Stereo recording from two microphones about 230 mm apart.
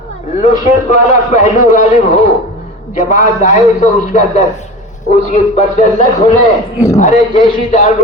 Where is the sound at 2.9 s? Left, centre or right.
Left.